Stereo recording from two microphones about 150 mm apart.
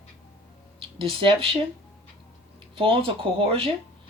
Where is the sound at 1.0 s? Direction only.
35° right (ahead or behind).